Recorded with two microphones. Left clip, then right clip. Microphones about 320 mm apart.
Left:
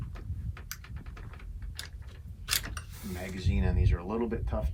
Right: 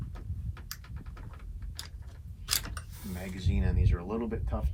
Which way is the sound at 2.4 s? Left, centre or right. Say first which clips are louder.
Left 1 dB; centre.